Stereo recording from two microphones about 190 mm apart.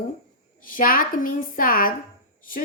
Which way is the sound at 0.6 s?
45° left (ahead or behind).